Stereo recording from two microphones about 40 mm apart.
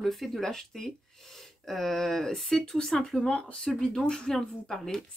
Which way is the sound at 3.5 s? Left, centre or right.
Centre.